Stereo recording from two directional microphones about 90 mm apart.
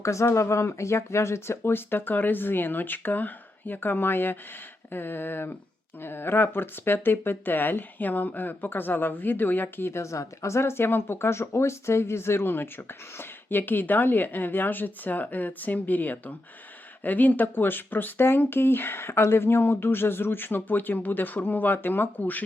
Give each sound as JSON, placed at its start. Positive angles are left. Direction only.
{"t": 0.0, "sound": "speech", "side_deg": 35}